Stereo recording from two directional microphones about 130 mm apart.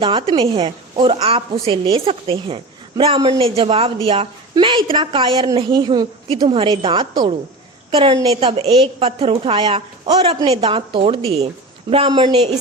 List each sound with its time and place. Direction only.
0.0 s a woman's voice: 40° right (ahead or behind)